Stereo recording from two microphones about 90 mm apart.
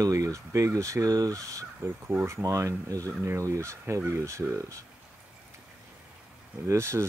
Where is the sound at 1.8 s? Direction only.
25° right (ahead or behind).